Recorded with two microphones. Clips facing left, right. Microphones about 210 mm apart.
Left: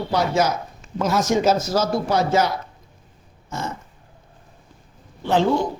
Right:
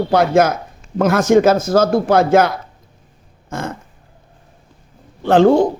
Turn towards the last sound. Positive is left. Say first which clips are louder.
# right 8 dB
turn(degrees=-55)  # may be behind; listen again after turning